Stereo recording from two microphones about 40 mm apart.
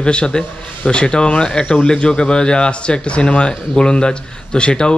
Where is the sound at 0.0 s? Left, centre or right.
Left.